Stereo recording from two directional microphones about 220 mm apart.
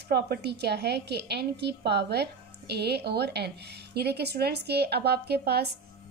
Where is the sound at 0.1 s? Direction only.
50° right (ahead or behind).